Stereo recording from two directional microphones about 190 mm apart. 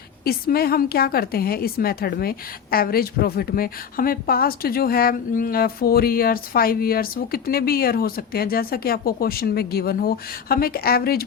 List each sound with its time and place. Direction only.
0.3 s a woman's voice: 55° left (ahead or behind)